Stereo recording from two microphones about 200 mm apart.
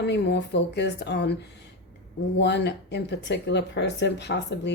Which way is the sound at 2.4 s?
60° left (ahead or behind).